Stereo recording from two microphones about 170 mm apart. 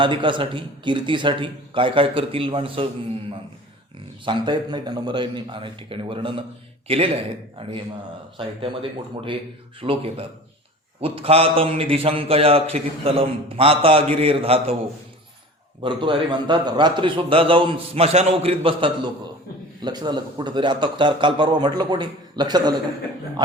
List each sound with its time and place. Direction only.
0.0 s a man's voice: 30° right (ahead or behind)
4.3 s a man's voice: 30° right (ahead or behind)
8.4 s a man's voice: 30° right (ahead or behind)
15.8 s a man's voice: 30° right (ahead or behind)